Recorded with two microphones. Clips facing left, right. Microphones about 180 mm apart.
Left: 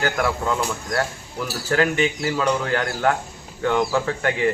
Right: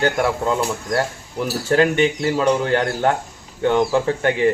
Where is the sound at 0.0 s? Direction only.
25° right (ahead or behind).